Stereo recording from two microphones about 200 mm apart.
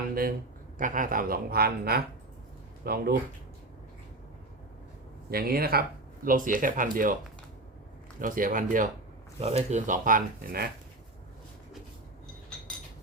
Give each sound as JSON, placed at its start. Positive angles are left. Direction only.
{"t": 0.1, "sound": "speech", "side_deg": -45}
{"t": 5.3, "sound": "speech", "side_deg": -50}
{"t": 8.2, "sound": "speech", "side_deg": -45}
{"t": 9.4, "sound": "speech", "side_deg": -30}